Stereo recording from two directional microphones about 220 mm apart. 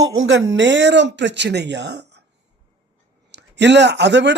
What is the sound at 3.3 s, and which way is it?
Speech, 50° right (ahead or behind).